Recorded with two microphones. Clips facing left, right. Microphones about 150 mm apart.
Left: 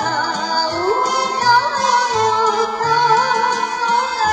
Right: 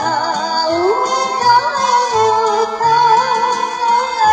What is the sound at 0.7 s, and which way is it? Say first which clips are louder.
Music: right 6 dB; 45° right (ahead or behind).